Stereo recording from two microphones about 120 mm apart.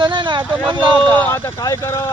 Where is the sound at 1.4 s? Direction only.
30° left (ahead or behind).